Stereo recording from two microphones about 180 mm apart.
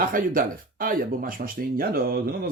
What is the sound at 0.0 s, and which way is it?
Speech, 50° right (ahead or behind).